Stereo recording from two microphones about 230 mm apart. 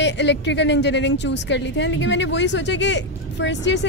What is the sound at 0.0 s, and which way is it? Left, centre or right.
A woman's voice, left.